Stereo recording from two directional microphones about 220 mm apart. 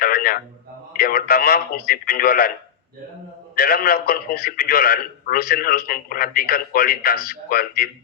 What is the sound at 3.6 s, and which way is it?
A man's voice, 45° left (ahead or behind).